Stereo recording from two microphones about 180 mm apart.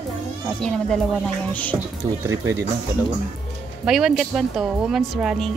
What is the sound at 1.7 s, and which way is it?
Speech, 15° right (ahead or behind).